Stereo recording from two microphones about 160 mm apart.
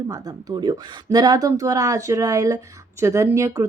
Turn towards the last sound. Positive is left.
turn(degrees=-20)  # may be behind; listen again after turning